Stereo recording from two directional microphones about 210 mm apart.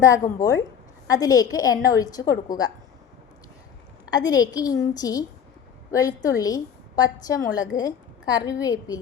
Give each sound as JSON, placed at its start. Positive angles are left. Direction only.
{"t": 0.0, "sound": "a woman's voice", "side_deg": 15}
{"t": 4.1, "sound": "a woman's voice", "side_deg": 20}